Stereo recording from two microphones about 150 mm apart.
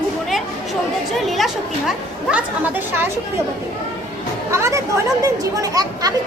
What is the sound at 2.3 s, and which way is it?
Speech, 15° right (ahead or behind).